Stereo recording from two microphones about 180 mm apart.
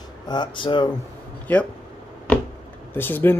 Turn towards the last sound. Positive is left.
turn(degrees=10)  # may be behind; listen again after turning